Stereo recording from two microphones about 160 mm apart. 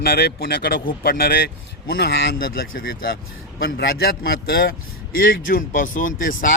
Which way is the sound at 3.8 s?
85° left.